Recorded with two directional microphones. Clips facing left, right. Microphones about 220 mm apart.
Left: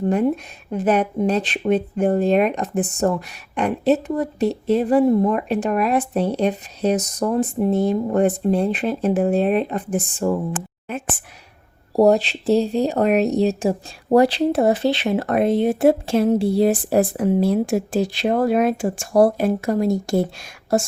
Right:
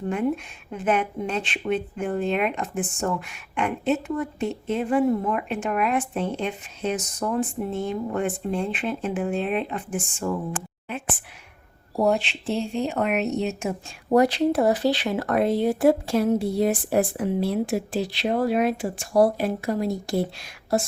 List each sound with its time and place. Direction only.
0.7 s speech: 40° left (ahead or behind)